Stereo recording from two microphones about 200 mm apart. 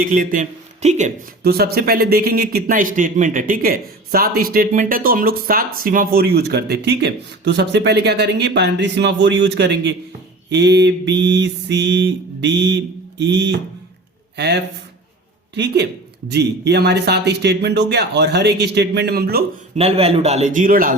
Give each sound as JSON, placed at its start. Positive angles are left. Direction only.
{"t": 0.0, "sound": "speech", "side_deg": -45}
{"t": 1.4, "sound": "speech", "side_deg": -50}
{"t": 19.7, "sound": "a man's voice", "side_deg": -30}